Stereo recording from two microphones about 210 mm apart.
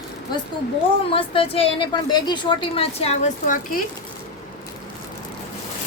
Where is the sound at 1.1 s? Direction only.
25° left (ahead or behind).